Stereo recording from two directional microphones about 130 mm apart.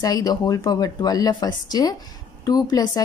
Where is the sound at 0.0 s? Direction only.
30° left (ahead or behind).